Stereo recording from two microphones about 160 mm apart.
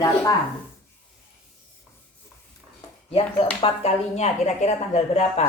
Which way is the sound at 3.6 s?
40° left (ahead or behind).